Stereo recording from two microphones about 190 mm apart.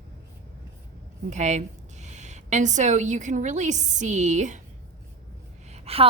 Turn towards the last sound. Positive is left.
turn(degrees=-30)  # may be behind; listen again after turning